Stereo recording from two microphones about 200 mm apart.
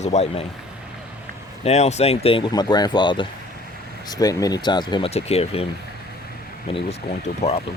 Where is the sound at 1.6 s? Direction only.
35° left (ahead or behind).